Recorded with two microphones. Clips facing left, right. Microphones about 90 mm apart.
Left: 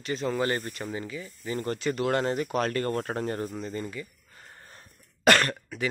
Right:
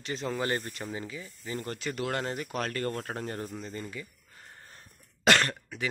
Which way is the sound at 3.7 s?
5° right (ahead or behind).